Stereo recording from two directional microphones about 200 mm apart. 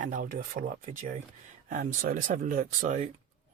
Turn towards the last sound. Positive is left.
turn(degrees=-40)  # may be behind; listen again after turning